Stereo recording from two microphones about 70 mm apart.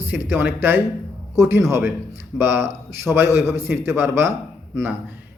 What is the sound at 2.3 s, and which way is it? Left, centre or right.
A man's voice, right.